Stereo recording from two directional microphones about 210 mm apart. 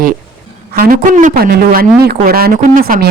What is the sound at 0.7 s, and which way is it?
Speech, 40° right (ahead or behind).